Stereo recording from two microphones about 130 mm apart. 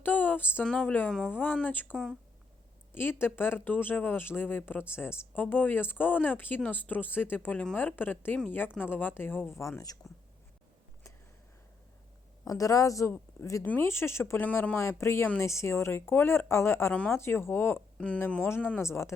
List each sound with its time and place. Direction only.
0.0 s a sound: 15° left (ahead or behind)
0.6 s speech: 5° left (ahead or behind); by 10.0 s 25° left (ahead or behind)
12.5 s a woman's voice: 25° left (ahead or behind)